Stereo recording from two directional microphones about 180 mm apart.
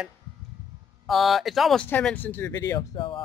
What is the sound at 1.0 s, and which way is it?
A man's voice, centre (ahead or behind).